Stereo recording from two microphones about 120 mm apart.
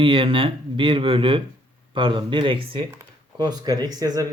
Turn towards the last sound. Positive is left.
turn(degrees=-30)  # may be behind; listen again after turning